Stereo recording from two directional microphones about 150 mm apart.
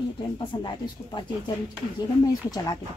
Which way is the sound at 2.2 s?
25° left (ahead or behind).